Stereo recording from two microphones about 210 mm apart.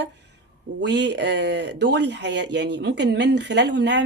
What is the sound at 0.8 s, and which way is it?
Speech, 55° right (ahead or behind).